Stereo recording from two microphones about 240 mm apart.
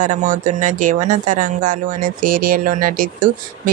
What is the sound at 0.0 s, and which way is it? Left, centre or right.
Speech, right.